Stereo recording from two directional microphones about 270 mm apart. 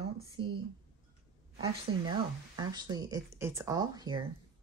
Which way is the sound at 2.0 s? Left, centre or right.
Centre.